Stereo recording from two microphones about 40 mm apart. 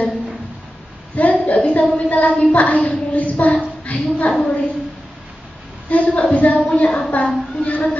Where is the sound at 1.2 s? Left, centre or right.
Left.